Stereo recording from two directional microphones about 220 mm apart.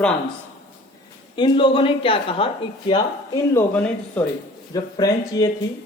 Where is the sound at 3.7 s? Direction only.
5° left (ahead or behind).